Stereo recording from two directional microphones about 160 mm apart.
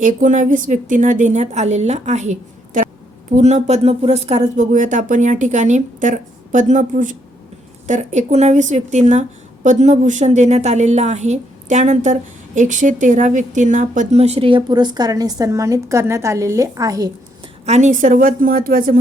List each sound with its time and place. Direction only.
0.0 s a woman's voice: 55° right (ahead or behind); by 17.1 s 20° right (ahead or behind)
17.7 s a woman's voice: 45° right (ahead or behind); by 18.9 s 60° right (ahead or behind)